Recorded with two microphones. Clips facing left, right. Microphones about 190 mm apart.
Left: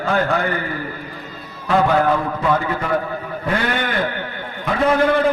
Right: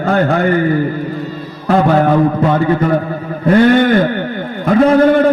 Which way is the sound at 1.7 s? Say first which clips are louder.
Right 5 dB; 40° right (ahead or behind).